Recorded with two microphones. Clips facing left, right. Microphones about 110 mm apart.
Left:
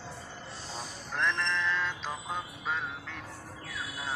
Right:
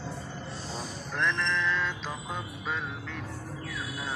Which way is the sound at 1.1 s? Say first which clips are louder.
Right 1 dB; 30° left (ahead or behind).